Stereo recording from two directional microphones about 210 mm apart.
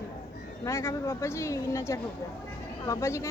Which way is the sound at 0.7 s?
15° left (ahead or behind).